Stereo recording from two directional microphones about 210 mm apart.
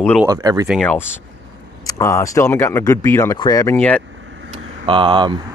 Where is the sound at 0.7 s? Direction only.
5° left (ahead or behind).